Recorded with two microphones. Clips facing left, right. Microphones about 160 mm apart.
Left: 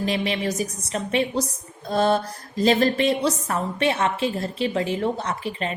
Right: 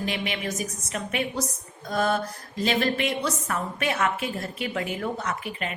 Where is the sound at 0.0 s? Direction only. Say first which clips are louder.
Left 5 dB; 35° left (ahead or behind).